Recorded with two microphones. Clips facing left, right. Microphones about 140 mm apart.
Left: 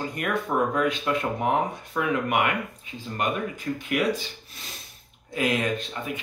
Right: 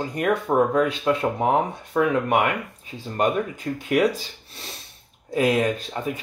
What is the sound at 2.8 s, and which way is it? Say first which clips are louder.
Speech: right 6 dB; 35° right (ahead or behind).